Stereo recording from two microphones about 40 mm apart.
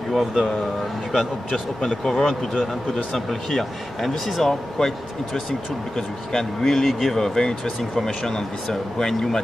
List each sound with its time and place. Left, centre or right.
0.1 s speech: centre
1.5 s speech: centre
7.2 s speech: centre